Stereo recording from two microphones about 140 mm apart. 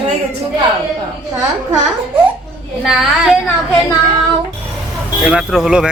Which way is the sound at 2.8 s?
5° right (ahead or behind).